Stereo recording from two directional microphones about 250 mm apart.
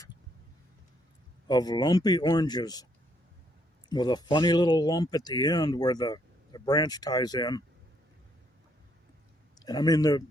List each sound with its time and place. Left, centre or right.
1.5 s speech: centre
3.8 s speech: centre
9.6 s speech: centre